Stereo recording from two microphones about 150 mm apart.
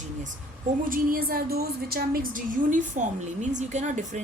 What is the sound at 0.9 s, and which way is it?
A woman's voice, 70° right (ahead or behind).